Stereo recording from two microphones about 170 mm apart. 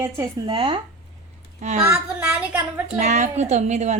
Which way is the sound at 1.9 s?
10° right (ahead or behind).